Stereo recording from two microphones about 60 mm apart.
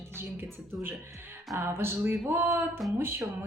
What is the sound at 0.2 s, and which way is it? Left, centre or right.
Speech, right.